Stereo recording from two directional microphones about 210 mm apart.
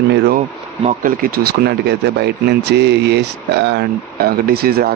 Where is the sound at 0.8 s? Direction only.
35° right (ahead or behind).